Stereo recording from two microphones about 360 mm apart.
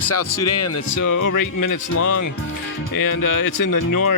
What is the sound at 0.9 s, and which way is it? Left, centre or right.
Speech, left.